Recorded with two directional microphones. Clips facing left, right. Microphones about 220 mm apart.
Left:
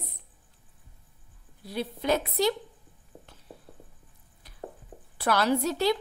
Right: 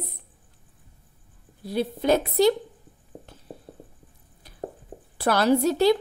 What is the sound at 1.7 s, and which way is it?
Speech, 35° right (ahead or behind).